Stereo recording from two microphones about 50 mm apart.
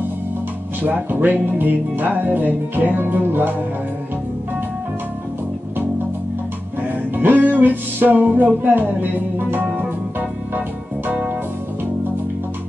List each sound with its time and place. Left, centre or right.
0.8 s speech: right
7.2 s music: right
8.6 s speech: right